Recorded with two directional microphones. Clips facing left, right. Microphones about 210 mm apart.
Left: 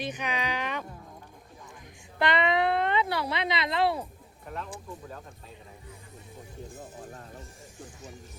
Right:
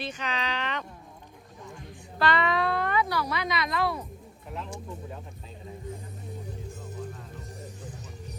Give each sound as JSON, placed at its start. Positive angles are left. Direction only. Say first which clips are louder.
{"t": 0.0, "sound": "speech", "louder": "left 1 dB", "side_deg": 15}
{"t": 2.1, "sound": "speech", "louder": "even", "side_deg": 20}